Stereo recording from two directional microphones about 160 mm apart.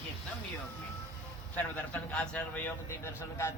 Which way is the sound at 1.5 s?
10° left (ahead or behind).